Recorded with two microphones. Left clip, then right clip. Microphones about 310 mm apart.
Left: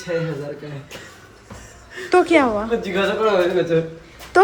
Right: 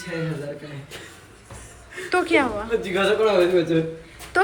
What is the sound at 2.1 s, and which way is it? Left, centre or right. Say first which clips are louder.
Speech: left 5 dB; centre.